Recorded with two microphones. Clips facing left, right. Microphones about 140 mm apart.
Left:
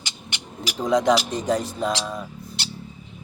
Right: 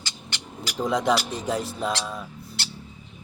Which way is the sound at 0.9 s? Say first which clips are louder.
Left 4 dB; 5° right (ahead or behind).